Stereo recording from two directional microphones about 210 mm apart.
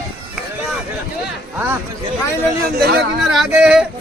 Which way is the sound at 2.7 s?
50° right (ahead or behind).